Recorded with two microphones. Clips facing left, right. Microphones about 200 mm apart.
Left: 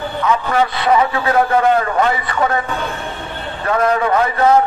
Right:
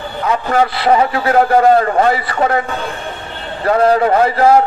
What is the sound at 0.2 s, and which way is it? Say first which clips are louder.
A man's voice: right 2 dB; 35° right (ahead or behind).